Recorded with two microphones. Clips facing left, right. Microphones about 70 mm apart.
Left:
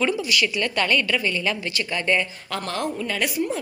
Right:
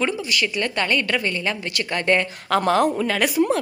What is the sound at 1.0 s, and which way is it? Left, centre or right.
Speech, right.